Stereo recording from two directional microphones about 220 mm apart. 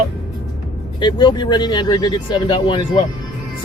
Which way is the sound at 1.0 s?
20° left (ahead or behind).